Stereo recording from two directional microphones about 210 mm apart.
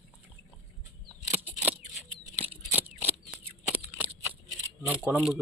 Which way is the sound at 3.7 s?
10° right (ahead or behind).